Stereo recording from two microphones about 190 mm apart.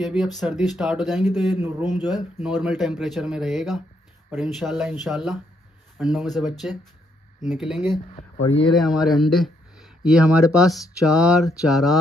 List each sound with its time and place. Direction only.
0.0 s speech: centre (ahead or behind)
1.6 s speech: 10° right (ahead or behind)
2.0 s speech: 20° left (ahead or behind)
2.4 s speech: centre (ahead or behind)
8.2 s speech: 30° left (ahead or behind)
8.7 s speech: centre (ahead or behind)